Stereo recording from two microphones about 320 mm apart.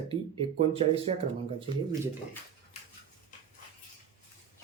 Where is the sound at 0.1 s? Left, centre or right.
Centre.